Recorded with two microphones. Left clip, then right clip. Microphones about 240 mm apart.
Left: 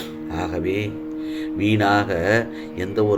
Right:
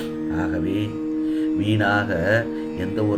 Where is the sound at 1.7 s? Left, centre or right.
Left.